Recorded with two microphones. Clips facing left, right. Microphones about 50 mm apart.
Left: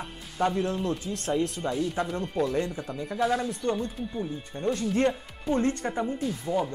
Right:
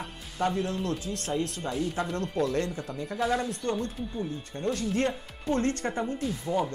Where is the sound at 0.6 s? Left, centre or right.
Centre.